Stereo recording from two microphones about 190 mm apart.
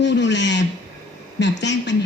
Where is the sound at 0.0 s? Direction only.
70° left (ahead or behind).